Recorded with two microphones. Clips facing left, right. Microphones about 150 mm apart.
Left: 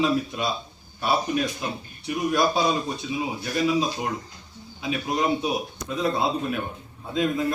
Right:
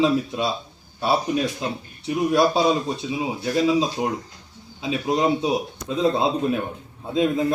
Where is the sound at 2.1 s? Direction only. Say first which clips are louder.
Right 4 dB; 30° right (ahead or behind).